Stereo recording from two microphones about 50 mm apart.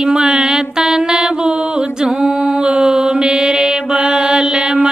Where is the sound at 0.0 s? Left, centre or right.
Centre.